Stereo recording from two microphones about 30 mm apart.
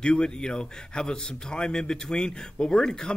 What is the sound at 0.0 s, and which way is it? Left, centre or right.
A man's voice, left.